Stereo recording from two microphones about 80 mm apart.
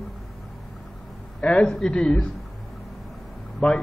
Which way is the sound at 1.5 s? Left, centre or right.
Centre.